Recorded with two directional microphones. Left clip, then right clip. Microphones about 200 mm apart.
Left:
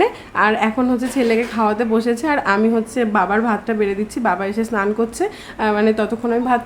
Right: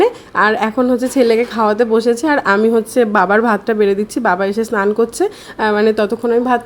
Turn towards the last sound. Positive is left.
turn(degrees=-25)  # may be behind; listen again after turning